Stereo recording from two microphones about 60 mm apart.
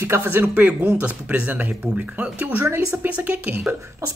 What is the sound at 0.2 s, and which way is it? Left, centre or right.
Speech, right.